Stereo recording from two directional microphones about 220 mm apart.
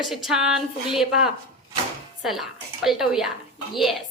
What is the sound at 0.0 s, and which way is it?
A woman's voice, centre (ahead or behind).